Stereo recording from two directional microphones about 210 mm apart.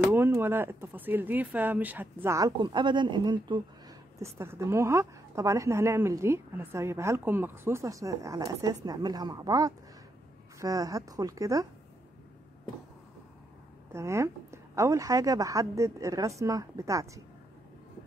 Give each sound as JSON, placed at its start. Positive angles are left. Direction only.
{"t": 0.0, "sound": "a woman's voice", "side_deg": -10}
{"t": 13.9, "sound": "a woman's voice", "side_deg": -15}